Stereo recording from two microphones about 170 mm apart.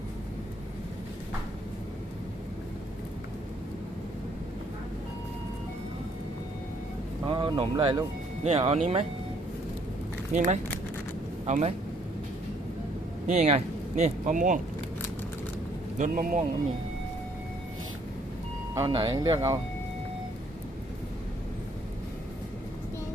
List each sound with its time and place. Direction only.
7.3 s speech: 30° right (ahead or behind)
10.3 s speech: 45° right (ahead or behind)
13.2 s speech: 40° right (ahead or behind)
16.0 s speech: 50° right (ahead or behind)
18.7 s speech: 20° right (ahead or behind)